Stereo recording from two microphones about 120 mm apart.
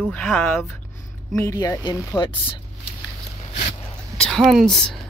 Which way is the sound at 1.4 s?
25° left (ahead or behind).